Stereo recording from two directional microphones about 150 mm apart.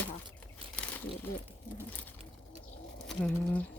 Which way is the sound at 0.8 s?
10° left (ahead or behind).